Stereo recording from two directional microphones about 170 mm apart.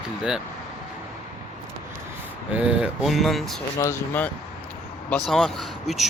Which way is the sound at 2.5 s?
5° right (ahead or behind).